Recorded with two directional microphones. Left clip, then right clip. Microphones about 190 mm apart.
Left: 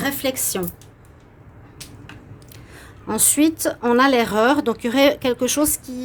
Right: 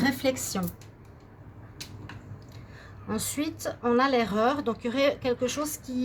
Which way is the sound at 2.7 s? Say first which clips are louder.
Left 9 dB; 65° left (ahead or behind).